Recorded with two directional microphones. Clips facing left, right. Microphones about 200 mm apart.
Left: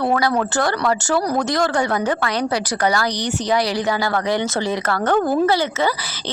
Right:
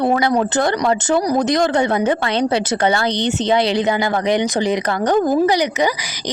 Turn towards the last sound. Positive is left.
turn(degrees=-15)  # may be behind; listen again after turning